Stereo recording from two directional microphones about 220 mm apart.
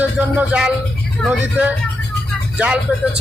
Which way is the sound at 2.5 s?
5° right (ahead or behind).